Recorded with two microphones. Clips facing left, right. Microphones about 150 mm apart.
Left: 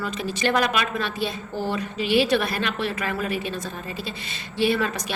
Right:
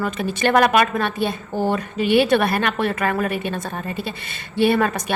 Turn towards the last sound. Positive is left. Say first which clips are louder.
# right 5 dB
turn(degrees=-55)  # may be behind; listen again after turning